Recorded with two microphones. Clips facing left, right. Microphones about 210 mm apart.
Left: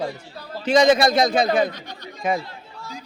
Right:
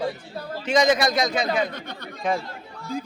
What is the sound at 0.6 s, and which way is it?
Speech, 30° left (ahead or behind).